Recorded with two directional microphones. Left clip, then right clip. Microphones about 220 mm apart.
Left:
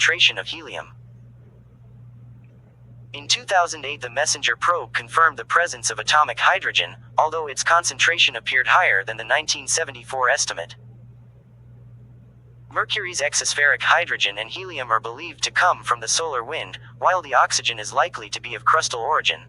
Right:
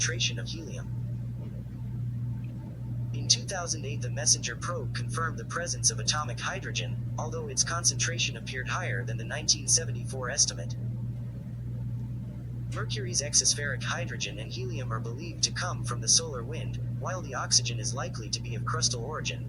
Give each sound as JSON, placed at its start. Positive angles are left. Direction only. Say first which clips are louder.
{"t": 0.0, "sound": "speech", "louder": "left 14 dB", "side_deg": 40}
{"t": 3.1, "sound": "speech", "louder": "left 8 dB", "side_deg": 40}
{"t": 12.7, "sound": "speech", "louder": "left 11 dB", "side_deg": 40}